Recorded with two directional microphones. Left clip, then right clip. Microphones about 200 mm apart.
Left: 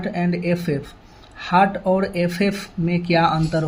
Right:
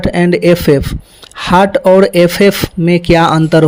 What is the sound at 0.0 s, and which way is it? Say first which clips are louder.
Speech: right 14 dB; 55° right (ahead or behind).